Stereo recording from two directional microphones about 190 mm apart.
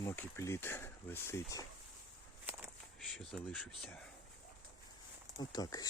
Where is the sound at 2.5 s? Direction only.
10° right (ahead or behind).